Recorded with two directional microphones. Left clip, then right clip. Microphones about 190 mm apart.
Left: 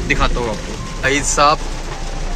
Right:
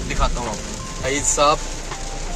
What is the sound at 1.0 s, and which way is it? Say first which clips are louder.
Speech: left 4 dB; 5° right (ahead or behind).